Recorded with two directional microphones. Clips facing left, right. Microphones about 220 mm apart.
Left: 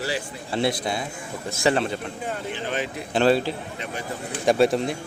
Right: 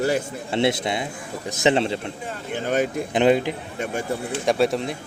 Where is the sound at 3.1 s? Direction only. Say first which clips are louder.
Right 1 dB; 15° right (ahead or behind).